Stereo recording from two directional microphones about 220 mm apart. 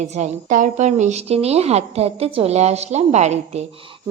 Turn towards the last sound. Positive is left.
turn(degrees=-30)  # may be behind; listen again after turning